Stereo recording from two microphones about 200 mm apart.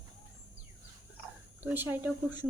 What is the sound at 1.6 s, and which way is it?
Speech, 10° right (ahead or behind).